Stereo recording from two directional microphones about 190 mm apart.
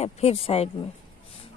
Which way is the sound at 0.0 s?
30° left (ahead or behind).